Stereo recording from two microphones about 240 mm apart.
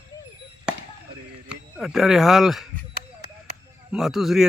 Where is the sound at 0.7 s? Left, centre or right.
Centre.